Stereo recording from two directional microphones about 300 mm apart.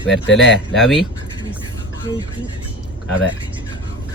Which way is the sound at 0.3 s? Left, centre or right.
Left.